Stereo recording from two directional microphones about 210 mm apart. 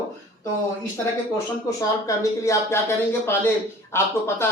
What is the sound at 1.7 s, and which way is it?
Speech, 15° left (ahead or behind).